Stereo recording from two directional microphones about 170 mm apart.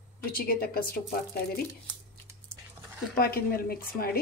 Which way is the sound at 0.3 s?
60° left (ahead or behind).